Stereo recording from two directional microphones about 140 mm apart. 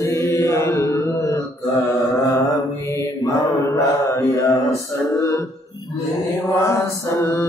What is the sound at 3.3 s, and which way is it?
Mantra, 20° left (ahead or behind).